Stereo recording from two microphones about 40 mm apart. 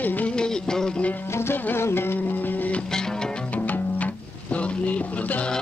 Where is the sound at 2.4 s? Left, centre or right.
Left.